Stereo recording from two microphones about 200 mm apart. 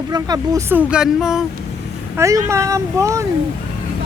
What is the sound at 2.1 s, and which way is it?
Speech, 15° right (ahead or behind).